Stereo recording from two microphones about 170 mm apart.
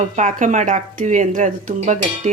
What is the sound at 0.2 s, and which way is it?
Speech, 45° right (ahead or behind).